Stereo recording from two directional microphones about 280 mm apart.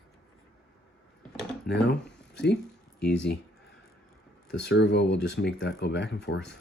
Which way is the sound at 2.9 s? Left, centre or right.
Left.